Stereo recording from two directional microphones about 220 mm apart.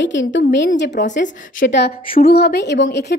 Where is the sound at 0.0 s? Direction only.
55° left (ahead or behind).